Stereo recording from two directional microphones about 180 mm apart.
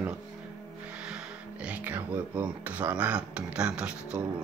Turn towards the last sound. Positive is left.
turn(degrees=-5)  # may be behind; listen again after turning